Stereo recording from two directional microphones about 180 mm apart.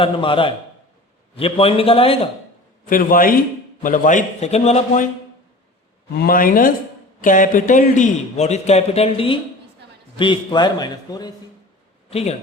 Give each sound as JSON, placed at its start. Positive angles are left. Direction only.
{"t": 0.0, "sound": "a man's voice", "side_deg": 30}
{"t": 2.8, "sound": "a man's voice", "side_deg": 50}
{"t": 6.1, "sound": "a man's voice", "side_deg": 55}
{"t": 12.1, "sound": "a man's voice", "side_deg": 35}